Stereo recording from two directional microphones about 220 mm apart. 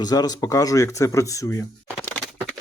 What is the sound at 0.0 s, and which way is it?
Speech, 15° left (ahead or behind).